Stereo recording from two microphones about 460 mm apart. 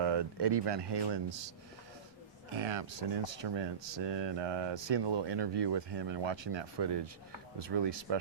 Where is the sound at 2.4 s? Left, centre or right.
Right.